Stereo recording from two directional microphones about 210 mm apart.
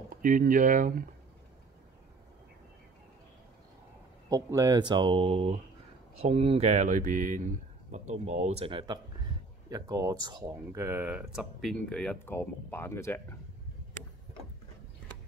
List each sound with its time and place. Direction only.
0.2 s speech: 40° right (ahead or behind)
4.3 s speech: 15° right (ahead or behind); by 13.4 s 10° left (ahead or behind)